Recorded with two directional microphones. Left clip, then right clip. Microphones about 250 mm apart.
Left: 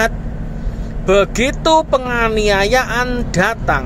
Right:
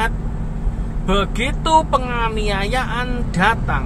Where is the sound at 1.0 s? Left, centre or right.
Left.